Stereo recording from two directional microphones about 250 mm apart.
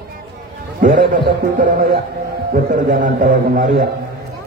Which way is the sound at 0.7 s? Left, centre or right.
Right.